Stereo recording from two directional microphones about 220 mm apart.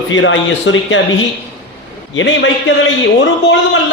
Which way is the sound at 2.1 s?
55° left (ahead or behind).